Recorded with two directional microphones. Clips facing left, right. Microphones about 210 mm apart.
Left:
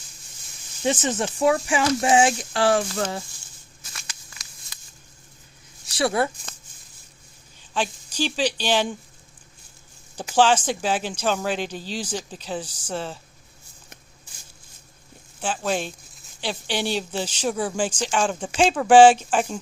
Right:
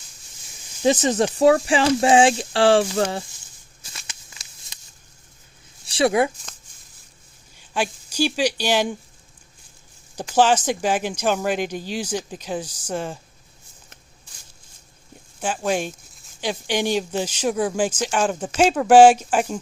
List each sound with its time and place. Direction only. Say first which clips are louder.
0.9 s speech: right 5 dB; 40° right (ahead or behind)
3.9 s a sound: even; 20° right (ahead or behind)
5.8 s speech: right 4 dB; 25° right (ahead or behind)
7.7 s speech: right 2 dB; 10° right (ahead or behind)
10.3 s speech: right 1 dB; 10° right (ahead or behind)
15.4 s speech: right 2 dB; 10° right (ahead or behind)